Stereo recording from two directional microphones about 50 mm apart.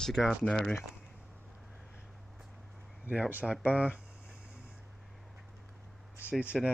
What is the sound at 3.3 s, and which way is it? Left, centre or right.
Speech, right.